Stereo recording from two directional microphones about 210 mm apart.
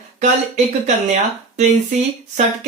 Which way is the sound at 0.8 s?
35° right (ahead or behind).